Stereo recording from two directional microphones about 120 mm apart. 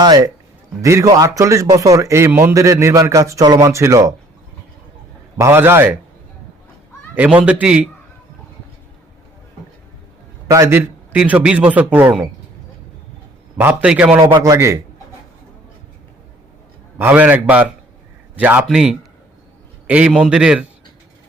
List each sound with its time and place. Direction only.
0.0 s a man's voice: 35° right (ahead or behind)
5.4 s a man's voice: 20° right (ahead or behind)
7.2 s a man's voice: 10° right (ahead or behind)
10.5 s a man's voice: 20° right (ahead or behind)
13.6 s a man's voice: 10° right (ahead or behind)
14.3 s a man's voice: 30° right (ahead or behind)
17.0 s a man's voice: 15° right (ahead or behind)